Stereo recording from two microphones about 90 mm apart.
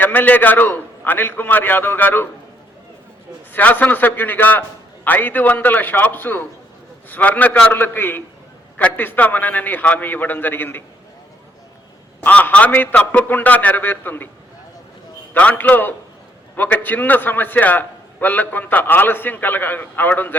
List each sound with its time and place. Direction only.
0.0 s a man's voice: 20° left (ahead or behind)
3.5 s a man's voice: 20° left (ahead or behind)
12.2 s a man's voice: 15° left (ahead or behind)
15.3 s a man's voice: 20° left (ahead or behind)